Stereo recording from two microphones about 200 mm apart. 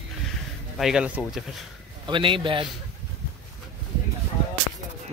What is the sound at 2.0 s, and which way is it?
Speech, 25° right (ahead or behind).